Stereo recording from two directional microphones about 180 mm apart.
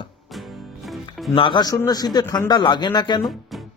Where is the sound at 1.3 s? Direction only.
25° left (ahead or behind).